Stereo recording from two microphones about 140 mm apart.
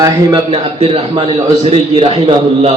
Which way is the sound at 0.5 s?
45° right (ahead or behind).